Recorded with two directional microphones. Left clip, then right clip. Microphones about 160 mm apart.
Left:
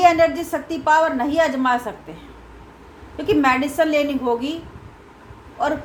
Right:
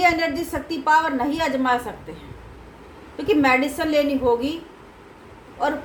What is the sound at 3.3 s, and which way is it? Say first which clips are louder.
Speech: left 1 dB; 45° left (ahead or behind).